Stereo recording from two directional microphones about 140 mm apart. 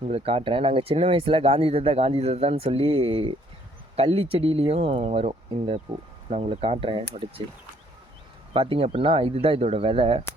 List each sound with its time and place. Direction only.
0.1 s speech: 45° right (ahead or behind)
8.5 s speech: 40° right (ahead or behind)